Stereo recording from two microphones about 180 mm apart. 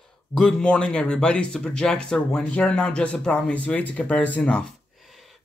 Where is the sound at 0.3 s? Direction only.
5° left (ahead or behind).